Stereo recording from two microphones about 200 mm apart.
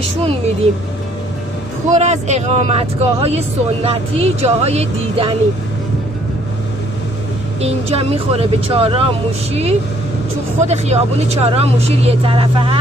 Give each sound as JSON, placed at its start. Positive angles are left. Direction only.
{"t": 1.9, "sound": "speech", "side_deg": -35}
{"t": 7.6, "sound": "speech", "side_deg": -30}